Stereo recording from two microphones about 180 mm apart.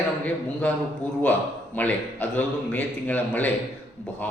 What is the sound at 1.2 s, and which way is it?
Speech, 10° left (ahead or behind).